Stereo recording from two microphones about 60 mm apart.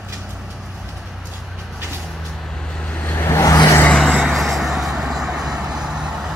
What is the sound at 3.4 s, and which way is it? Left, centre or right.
Vehicle, left.